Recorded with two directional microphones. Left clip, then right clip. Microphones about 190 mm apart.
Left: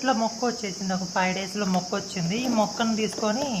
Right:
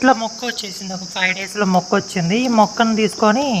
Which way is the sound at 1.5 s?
30° right (ahead or behind).